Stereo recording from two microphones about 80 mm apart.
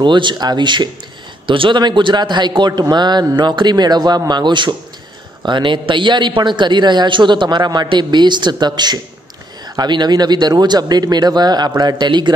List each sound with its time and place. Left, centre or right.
0.0 s a man's voice: right
1.5 s a man's voice: right
5.4 s a man's voice: right